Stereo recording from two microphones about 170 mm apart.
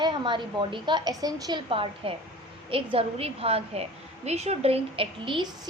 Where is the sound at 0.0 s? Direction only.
30° right (ahead or behind).